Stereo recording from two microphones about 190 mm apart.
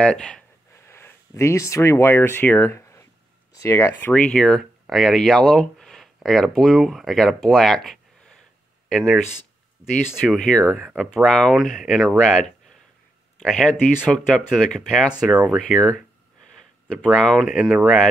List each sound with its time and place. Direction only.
0.0 s speech: 5° left (ahead or behind)
7.4 s a sound: centre (ahead or behind)
8.8 s speech: centre (ahead or behind)
10.2 s speech: centre (ahead or behind)
10.6 s speech: 10° right (ahead or behind)
11.0 s speech: 5° left (ahead or behind)